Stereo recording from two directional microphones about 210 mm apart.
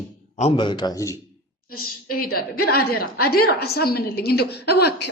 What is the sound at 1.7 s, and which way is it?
A woman's voice, 45° left (ahead or behind).